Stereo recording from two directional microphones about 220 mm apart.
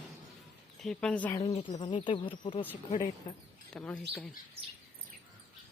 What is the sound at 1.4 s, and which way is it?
Speech, 30° left (ahead or behind).